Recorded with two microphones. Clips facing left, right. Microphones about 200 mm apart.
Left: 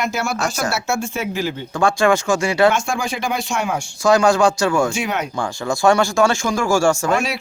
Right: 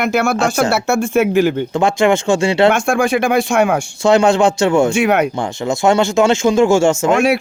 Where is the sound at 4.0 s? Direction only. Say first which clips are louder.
Right 2 dB; 25° right (ahead or behind).